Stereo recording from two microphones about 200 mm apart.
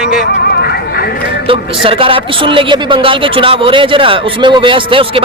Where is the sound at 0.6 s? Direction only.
50° left (ahead or behind).